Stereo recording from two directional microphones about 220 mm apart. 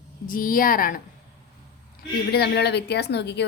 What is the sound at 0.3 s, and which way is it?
Speech, 40° left (ahead or behind).